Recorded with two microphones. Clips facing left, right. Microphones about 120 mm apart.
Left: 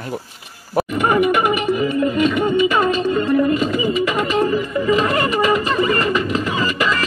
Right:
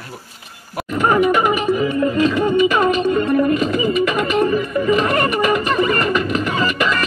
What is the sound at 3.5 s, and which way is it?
Music, 20° left (ahead or behind).